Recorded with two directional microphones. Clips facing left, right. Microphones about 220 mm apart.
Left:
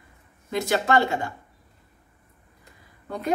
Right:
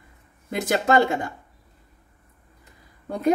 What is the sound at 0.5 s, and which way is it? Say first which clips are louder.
Speech: right 2 dB; 50° right (ahead or behind).